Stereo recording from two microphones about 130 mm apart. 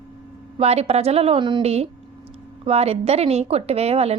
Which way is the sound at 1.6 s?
50° right (ahead or behind).